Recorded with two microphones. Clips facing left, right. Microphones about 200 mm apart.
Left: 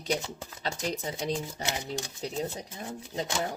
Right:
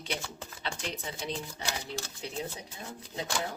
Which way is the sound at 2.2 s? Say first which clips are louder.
Left 4 dB; 40° left (ahead or behind).